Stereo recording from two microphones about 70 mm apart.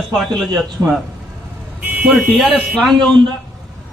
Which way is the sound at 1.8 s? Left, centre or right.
Centre.